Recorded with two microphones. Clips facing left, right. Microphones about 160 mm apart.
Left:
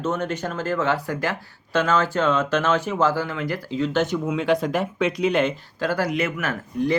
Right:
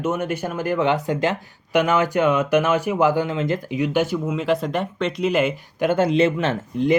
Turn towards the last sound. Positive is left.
turn(degrees=-25)  # may be behind; listen again after turning